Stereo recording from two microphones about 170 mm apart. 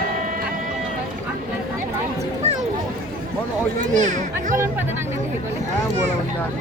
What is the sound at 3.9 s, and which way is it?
Speech, 45° right (ahead or behind).